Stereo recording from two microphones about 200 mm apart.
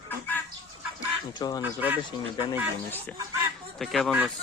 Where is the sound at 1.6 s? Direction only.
10° right (ahead or behind).